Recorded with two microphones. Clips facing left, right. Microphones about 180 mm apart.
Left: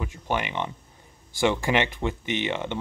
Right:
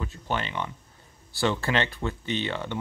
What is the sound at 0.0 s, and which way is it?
Speech, 15° left (ahead or behind).